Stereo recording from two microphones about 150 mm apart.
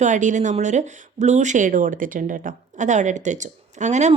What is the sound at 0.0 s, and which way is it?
A woman's voice, 55° right (ahead or behind).